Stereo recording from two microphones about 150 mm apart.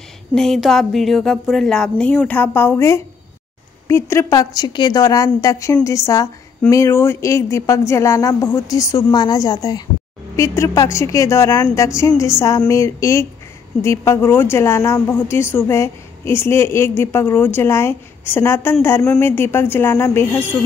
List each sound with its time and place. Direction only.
0.3 s a woman's voice: centre (ahead or behind)